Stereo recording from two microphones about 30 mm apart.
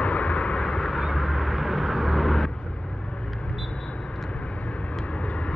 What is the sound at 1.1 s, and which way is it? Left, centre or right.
Vehicle, centre.